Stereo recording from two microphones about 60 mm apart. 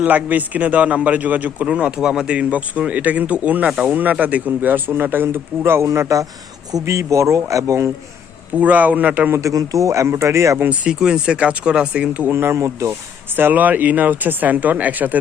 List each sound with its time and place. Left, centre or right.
0.0 s speech: right
1.6 s speech: centre
4.2 s speech: right
8.5 s speech: right
9.5 s speech: right
10.1 s speech: right
10.7 s speech: centre
12.3 s speech: right
13.3 s speech: right